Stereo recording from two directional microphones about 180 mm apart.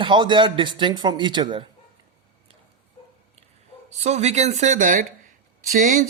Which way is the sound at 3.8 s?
40° right (ahead or behind).